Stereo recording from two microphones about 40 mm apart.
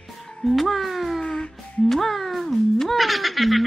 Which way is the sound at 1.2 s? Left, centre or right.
Left.